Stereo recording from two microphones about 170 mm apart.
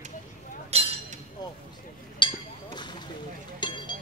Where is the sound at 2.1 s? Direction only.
30° left (ahead or behind).